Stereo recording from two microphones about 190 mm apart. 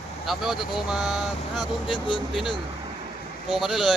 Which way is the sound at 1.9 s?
25° left (ahead or behind).